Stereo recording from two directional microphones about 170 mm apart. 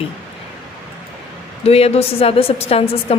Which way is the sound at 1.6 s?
35° left (ahead or behind).